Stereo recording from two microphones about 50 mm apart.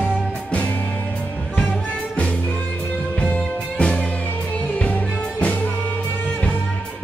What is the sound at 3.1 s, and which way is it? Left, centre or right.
Music, left.